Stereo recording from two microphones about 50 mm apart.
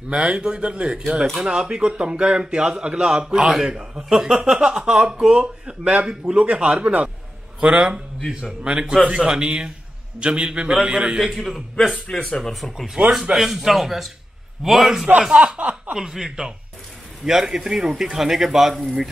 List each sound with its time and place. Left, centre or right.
0.1 s a man's voice: centre
4.3 s a man's voice: right
7.7 s a man's voice: centre
11.1 s speech: centre
12.1 s speech: centre
12.8 s a man's voice: centre
15.1 s a man's voice: right